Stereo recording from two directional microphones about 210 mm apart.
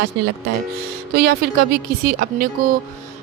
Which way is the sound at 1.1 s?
50° right (ahead or behind).